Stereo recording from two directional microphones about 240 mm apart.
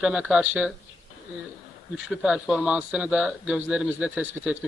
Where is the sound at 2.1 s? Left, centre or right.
Centre.